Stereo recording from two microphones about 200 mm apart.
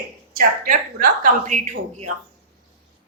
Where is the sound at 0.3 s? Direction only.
45° right (ahead or behind).